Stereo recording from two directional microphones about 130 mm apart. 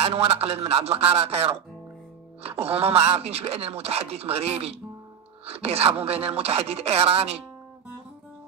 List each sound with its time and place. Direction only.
0.0 s speech: 50° right (ahead or behind)
2.6 s speech: 50° right (ahead or behind)